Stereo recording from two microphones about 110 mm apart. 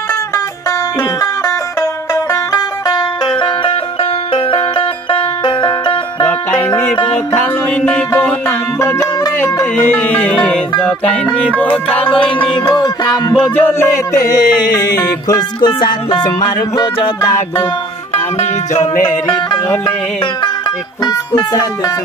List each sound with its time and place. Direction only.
2.5 s music: 35° left (ahead or behind)
4.3 s music: 55° left (ahead or behind)
7.3 s music: 15° left (ahead or behind)
9.8 s music: 15° left (ahead or behind)
12.6 s music: 40° left (ahead or behind)
13.6 s music: 20° left (ahead or behind)
15.0 s music: 35° left (ahead or behind)
18.1 s music: 90° left
21.0 s music: 35° left (ahead or behind)